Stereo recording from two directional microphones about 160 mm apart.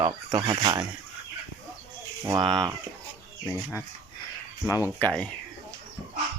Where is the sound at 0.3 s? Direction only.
30° right (ahead or behind).